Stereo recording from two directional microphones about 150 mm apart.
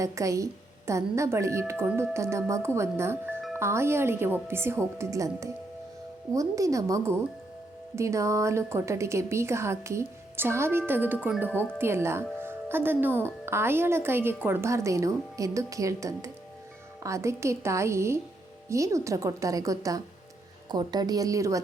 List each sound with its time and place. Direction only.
0.0 s a woman's voice: 20° right (ahead or behind)